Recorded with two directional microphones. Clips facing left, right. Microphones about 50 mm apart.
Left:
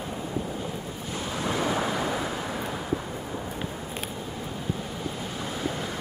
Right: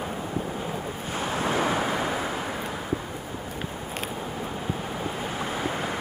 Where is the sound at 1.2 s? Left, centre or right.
Right.